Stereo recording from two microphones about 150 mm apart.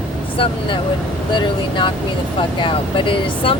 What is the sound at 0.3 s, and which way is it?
Speech, 35° left (ahead or behind).